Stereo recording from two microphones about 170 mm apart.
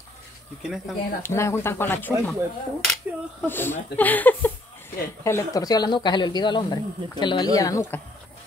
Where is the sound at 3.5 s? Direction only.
10° left (ahead or behind).